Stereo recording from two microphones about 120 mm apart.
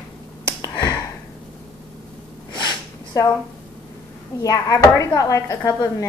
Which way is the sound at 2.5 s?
35° left (ahead or behind).